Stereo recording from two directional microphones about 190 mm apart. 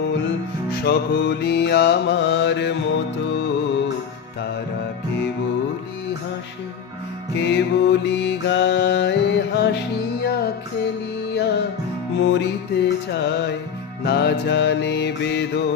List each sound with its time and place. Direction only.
0.7 s music: 65° left (ahead or behind)
7.3 s music: 65° left (ahead or behind)